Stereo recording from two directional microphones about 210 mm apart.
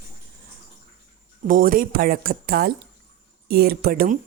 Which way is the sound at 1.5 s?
40° right (ahead or behind).